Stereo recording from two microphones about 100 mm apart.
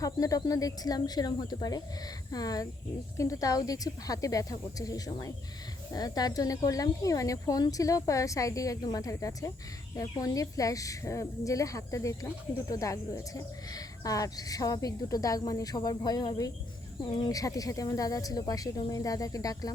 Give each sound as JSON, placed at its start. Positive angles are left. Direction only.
{"t": 0.0, "sound": "a woman's voice", "side_deg": 35}